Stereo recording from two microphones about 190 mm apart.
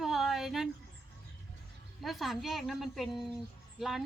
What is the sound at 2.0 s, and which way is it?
Speech, centre (ahead or behind).